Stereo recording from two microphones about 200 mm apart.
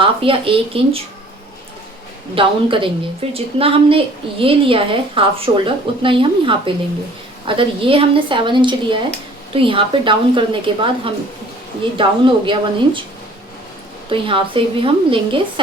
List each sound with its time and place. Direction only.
0.0 s a woman's voice: 25° right (ahead or behind)
2.3 s a woman's voice: 25° right (ahead or behind)
14.1 s a woman's voice: 25° right (ahead or behind)